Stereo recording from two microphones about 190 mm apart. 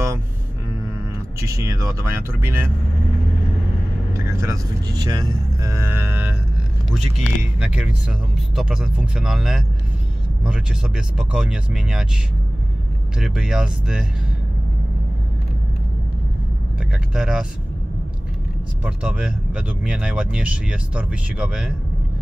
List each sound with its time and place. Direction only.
1.4 s speech: 15° right (ahead or behind)
4.1 s speech: 15° right (ahead or behind)
11.1 s speech: 5° right (ahead or behind)
13.2 s speech: 5° right (ahead or behind)
17.1 s speech: 5° right (ahead or behind)
18.9 s speech: 5° right (ahead or behind)